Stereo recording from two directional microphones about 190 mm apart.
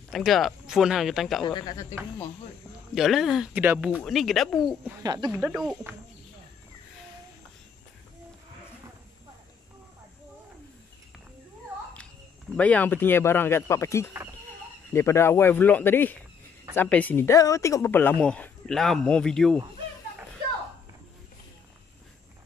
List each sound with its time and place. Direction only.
0.1 s speech: centre (ahead or behind)
1.4 s speech: 20° left (ahead or behind)
2.9 s speech: centre (ahead or behind)
5.0 s speech: 20° right (ahead or behind)
5.3 s speech: 5° right (ahead or behind)
12.5 s speech: 5° left (ahead or behind)